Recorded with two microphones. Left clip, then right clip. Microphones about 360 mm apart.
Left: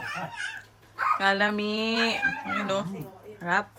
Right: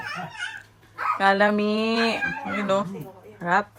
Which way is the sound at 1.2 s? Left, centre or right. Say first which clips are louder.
Right 10 dB; centre.